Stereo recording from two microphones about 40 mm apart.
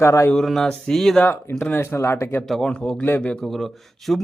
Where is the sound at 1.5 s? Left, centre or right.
Left.